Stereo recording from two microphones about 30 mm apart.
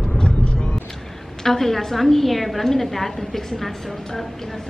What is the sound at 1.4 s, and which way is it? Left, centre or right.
A woman's voice, centre.